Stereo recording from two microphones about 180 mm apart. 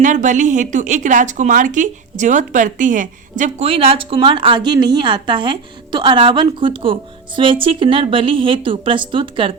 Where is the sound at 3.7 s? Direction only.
30° right (ahead or behind).